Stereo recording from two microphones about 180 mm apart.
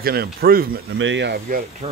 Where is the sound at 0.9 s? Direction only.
90° right.